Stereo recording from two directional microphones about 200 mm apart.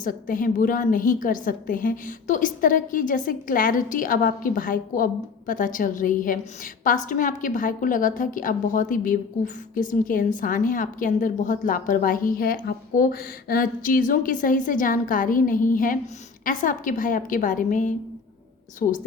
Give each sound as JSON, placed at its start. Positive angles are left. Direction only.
{"t": 0.0, "sound": "a woman's voice", "side_deg": 45}